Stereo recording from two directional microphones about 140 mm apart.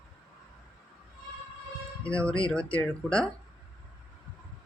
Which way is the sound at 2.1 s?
10° left (ahead or behind).